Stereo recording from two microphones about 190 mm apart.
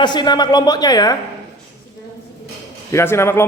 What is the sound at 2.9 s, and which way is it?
Speech, 15° left (ahead or behind).